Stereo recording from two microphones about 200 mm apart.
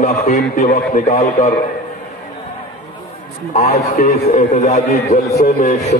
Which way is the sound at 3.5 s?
30° left (ahead or behind).